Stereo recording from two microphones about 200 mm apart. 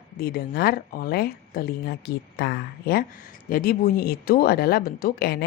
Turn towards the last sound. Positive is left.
turn(degrees=50)  # may be behind; listen again after turning